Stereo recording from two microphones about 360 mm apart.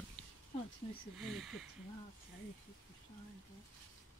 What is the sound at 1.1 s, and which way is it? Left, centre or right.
Speech, centre.